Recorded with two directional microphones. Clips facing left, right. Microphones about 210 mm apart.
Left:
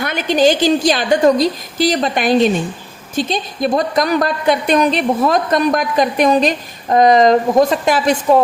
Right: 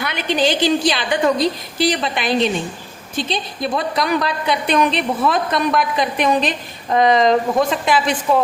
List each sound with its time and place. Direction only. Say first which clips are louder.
0.0 s a woman's voice: left 5 dB; 45° left (ahead or behind)